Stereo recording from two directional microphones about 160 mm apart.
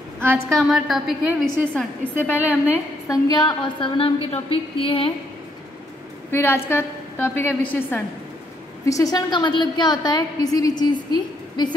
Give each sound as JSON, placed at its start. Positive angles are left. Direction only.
{"t": 0.5, "sound": "a woman's voice", "side_deg": 0}
{"t": 1.8, "sound": "a woman's voice", "side_deg": 15}
{"t": 6.3, "sound": "a woman's voice", "side_deg": 15}